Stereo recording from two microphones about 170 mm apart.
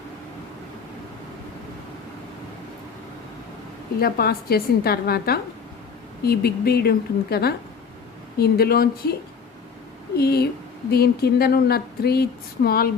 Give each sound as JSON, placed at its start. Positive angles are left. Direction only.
{"t": 4.0, "sound": "a woman's voice", "side_deg": 65}
{"t": 10.2, "sound": "a woman's voice", "side_deg": 70}